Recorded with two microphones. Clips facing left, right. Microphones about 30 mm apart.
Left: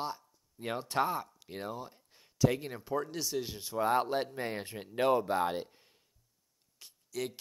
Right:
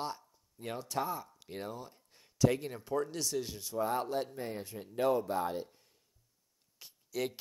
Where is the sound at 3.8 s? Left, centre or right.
Left.